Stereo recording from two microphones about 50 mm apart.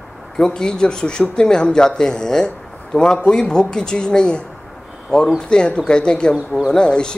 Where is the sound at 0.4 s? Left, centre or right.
Centre.